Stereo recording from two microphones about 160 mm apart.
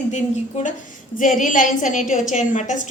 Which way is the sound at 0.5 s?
50° left (ahead or behind).